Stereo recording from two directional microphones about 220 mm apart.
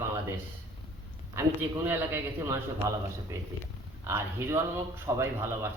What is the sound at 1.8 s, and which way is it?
A man's voice, 10° right (ahead or behind).